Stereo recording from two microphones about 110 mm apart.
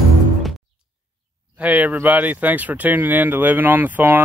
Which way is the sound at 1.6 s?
15° right (ahead or behind).